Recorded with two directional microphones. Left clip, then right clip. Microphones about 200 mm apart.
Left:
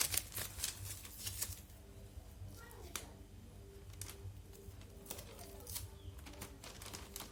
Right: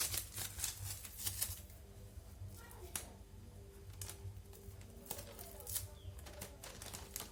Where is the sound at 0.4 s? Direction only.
40° left (ahead or behind).